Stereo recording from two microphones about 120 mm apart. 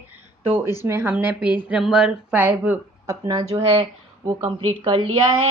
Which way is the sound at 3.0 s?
30° right (ahead or behind).